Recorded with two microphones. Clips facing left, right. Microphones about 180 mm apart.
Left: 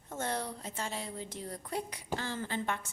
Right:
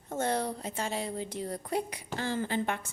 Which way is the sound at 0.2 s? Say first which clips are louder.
Right 6 dB; 65° right (ahead or behind).